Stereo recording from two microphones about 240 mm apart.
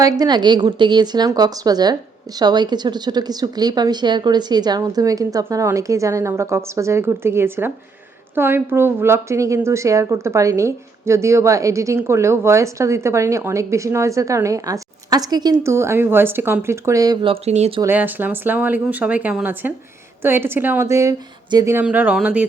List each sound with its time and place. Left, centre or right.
0.0 s a woman's voice: centre
17.8 s a woman's voice: centre